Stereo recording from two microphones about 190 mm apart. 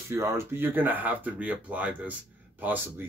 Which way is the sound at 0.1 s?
15° right (ahead or behind).